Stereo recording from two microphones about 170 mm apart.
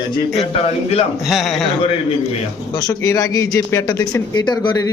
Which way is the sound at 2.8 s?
20° left (ahead or behind).